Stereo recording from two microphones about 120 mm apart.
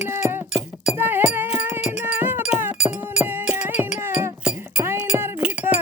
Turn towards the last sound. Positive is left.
turn(degrees=-10)  # may be behind; listen again after turning